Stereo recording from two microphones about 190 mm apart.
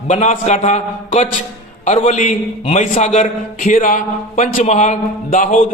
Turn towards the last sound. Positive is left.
turn(degrees=40)  # may be behind; listen again after turning